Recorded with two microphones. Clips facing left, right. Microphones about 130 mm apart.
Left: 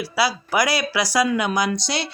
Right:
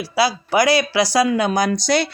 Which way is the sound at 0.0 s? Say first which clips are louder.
Right 3 dB; 25° right (ahead or behind).